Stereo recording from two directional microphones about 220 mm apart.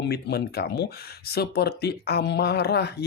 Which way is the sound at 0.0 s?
45° left (ahead or behind).